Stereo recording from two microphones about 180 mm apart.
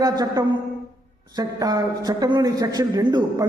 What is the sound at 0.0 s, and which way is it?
A man's voice, 20° right (ahead or behind).